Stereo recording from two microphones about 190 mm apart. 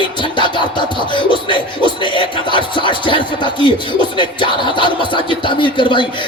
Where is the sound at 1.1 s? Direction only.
25° left (ahead or behind).